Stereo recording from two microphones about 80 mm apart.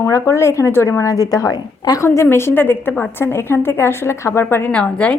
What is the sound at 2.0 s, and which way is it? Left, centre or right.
A woman's voice, left.